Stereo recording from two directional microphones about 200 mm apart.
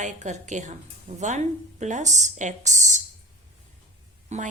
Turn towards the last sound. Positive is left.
turn(degrees=-35)  # may be behind; listen again after turning